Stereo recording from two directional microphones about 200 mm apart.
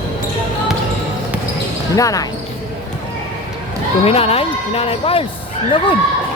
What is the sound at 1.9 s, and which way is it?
Speech, 15° left (ahead or behind).